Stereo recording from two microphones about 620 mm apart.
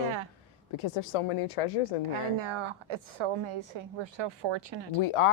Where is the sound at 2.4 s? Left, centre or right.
Right.